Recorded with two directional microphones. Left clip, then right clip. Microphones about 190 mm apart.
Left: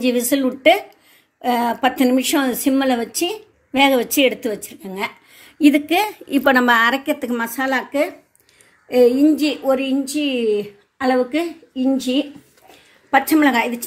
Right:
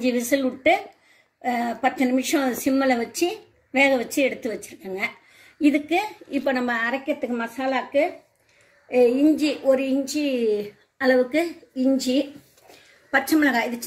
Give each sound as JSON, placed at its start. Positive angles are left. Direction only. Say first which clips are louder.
{"t": 0.0, "sound": "a woman's voice", "louder": "left 4 dB", "side_deg": 40}
{"t": 9.4, "sound": "a woman's voice", "louder": "left 2 dB", "side_deg": 45}
{"t": 10.1, "sound": "a woman's voice", "louder": "left 5 dB", "side_deg": 30}
{"t": 11.7, "sound": "speech", "louder": "left 2 dB", "side_deg": 15}
{"t": 13.1, "sound": "a woman's voice", "louder": "left 5 dB", "side_deg": 45}